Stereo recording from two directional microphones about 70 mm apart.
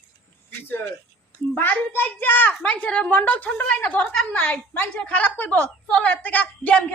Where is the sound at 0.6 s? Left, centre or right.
Left.